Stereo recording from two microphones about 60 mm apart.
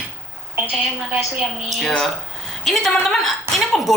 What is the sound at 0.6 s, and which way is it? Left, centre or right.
Speech, right.